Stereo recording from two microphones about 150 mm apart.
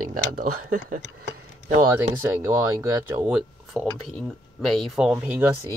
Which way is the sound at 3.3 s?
5° right (ahead or behind).